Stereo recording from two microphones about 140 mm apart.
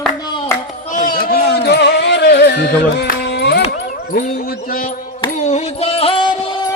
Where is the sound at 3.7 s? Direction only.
90° left.